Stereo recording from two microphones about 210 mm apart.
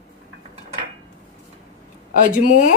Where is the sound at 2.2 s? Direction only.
40° left (ahead or behind).